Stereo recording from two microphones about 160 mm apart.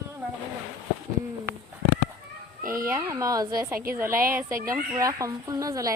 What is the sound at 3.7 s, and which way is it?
Speech, 70° right (ahead or behind).